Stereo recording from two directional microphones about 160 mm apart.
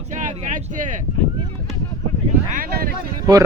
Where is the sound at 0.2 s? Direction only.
55° right (ahead or behind).